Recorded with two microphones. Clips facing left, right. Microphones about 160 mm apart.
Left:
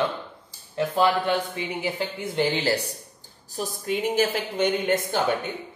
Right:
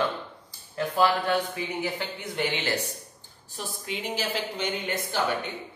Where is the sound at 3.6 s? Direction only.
50° left (ahead or behind).